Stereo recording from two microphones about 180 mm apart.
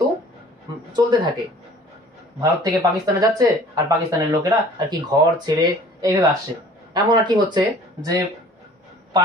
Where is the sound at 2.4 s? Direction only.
20° right (ahead or behind).